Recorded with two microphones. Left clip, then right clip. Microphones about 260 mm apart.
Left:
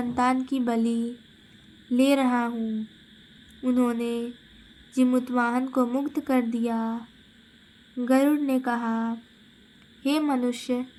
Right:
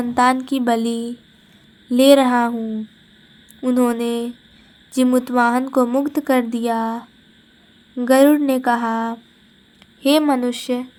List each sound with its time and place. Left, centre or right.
0.0 s a woman's voice: right
3.6 s a woman's voice: right